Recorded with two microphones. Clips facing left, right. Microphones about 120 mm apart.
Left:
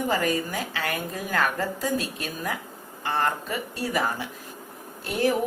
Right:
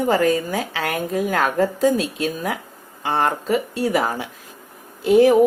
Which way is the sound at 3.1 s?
90° right.